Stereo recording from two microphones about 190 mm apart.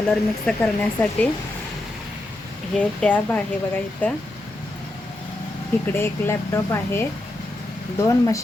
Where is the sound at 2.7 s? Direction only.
5° left (ahead or behind).